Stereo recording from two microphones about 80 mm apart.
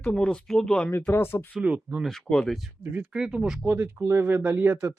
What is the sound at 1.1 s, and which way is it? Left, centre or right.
Speech, left.